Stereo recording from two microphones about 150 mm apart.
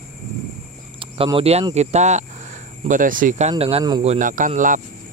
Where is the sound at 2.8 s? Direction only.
60° right (ahead or behind).